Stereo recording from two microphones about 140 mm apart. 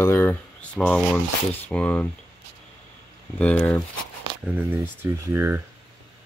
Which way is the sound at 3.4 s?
10° left (ahead or behind).